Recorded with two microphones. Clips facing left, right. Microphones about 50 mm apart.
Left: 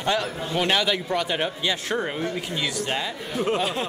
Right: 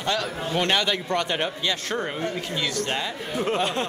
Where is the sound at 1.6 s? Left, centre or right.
Centre.